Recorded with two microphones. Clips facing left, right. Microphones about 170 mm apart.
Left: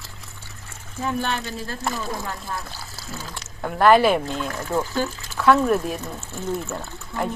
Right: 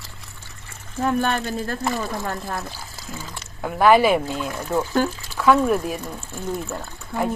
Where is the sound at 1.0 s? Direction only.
50° right (ahead or behind).